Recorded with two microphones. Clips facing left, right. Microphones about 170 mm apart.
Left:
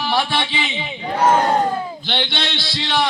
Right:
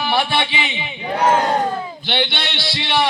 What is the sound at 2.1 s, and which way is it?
Speech, 5° right (ahead or behind).